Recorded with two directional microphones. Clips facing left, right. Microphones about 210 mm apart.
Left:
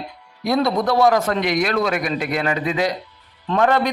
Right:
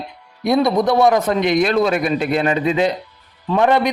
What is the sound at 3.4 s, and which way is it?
Speech, 15° right (ahead or behind).